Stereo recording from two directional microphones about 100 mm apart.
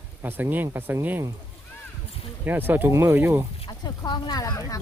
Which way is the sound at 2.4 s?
20° right (ahead or behind).